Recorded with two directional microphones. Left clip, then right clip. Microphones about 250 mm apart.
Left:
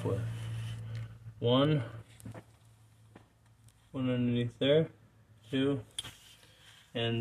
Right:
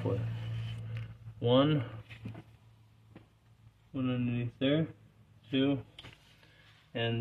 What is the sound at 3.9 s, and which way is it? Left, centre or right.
Speech, left.